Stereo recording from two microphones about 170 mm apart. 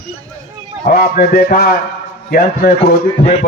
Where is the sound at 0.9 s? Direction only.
60° left (ahead or behind).